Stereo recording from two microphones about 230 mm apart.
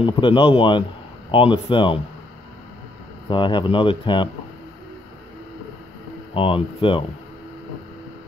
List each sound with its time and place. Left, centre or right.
0.0 s speech: left
3.3 s speech: left
6.3 s speech: left